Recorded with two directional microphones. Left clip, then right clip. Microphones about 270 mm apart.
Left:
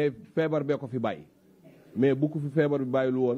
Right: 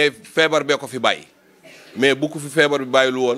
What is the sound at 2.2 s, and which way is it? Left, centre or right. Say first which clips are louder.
Speech: right 5 dB; right.